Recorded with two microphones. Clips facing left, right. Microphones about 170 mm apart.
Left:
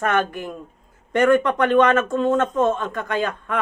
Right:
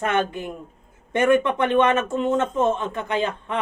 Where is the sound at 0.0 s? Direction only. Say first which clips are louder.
Left 1 dB; 20° right (ahead or behind).